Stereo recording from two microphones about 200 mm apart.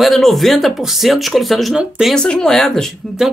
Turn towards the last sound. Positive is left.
turn(degrees=0)  # may be behind; listen again after turning